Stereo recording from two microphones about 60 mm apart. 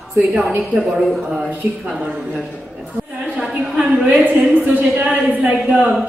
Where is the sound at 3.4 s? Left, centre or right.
Centre.